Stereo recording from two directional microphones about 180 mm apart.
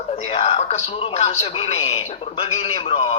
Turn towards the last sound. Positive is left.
turn(degrees=30)  # may be behind; listen again after turning